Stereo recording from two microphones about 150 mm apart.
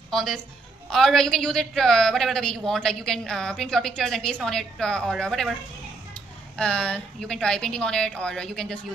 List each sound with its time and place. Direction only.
0.1 s a woman's voice: centre (ahead or behind)
6.5 s a woman's voice: 5° left (ahead or behind)